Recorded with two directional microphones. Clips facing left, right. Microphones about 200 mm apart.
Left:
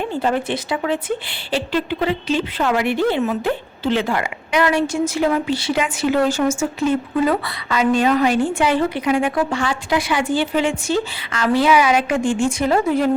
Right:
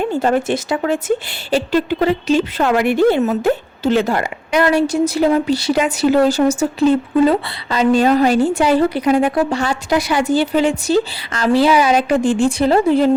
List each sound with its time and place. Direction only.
0.1 s speech: 45° right (ahead or behind); by 13.1 s 30° right (ahead or behind)